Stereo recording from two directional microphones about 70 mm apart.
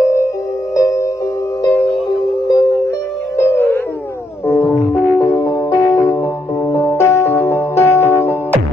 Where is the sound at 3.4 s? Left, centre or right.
Left.